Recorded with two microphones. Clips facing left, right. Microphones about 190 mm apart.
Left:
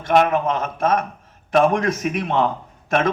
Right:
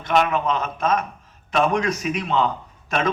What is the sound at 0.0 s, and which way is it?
A man's voice, 50° left (ahead or behind).